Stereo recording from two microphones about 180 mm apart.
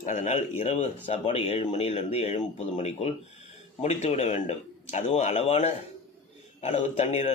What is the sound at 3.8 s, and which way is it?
A man's voice, 35° left (ahead or behind).